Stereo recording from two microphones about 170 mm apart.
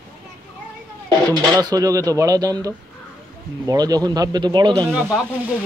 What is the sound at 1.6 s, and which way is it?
Speech, 20° right (ahead or behind).